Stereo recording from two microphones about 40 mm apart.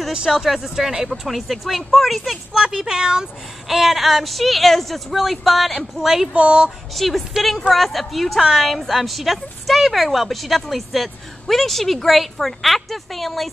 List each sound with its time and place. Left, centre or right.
0.1 s a woman's voice: centre
2.5 s speech: centre
3.6 s a woman's voice: centre
6.3 s speech: right
7.0 s a woman's voice: centre